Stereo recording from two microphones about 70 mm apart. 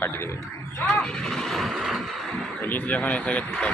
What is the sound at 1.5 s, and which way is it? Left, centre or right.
Vehicle, centre.